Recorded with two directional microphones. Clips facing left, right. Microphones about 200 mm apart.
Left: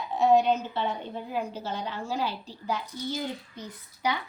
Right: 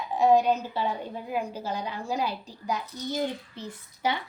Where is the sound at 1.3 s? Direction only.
10° right (ahead or behind).